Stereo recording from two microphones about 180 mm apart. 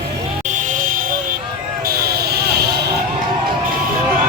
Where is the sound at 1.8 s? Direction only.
60° right (ahead or behind).